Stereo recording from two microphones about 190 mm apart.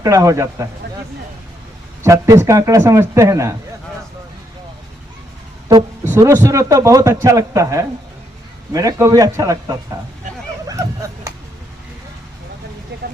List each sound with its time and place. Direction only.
0.0 s a man's voice: 15° right (ahead or behind)
2.0 s a man's voice: 15° right (ahead or behind)
5.6 s a man's voice: 15° right (ahead or behind)
10.7 s a sound: 15° right (ahead or behind)
12.9 s vehicle: 65° right (ahead or behind)